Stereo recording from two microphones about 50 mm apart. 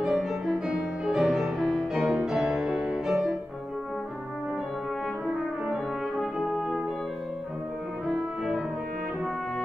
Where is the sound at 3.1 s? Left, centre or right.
Centre.